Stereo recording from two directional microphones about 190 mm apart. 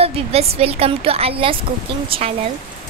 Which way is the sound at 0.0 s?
30° right (ahead or behind).